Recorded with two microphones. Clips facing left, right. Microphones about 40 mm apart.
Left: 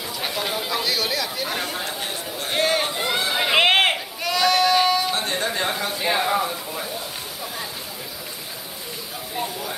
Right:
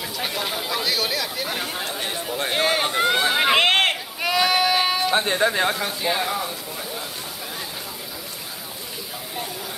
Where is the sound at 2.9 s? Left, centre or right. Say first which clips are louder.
Right 4 dB; right.